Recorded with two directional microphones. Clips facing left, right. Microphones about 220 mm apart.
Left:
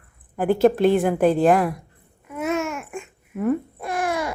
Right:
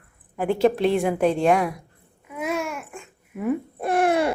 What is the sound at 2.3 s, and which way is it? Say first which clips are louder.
Babbling: left 3 dB; 10° right (ahead or behind).